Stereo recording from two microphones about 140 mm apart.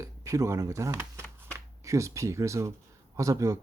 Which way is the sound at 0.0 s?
20° right (ahead or behind).